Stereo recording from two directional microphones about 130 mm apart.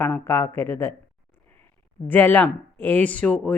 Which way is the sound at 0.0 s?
15° left (ahead or behind).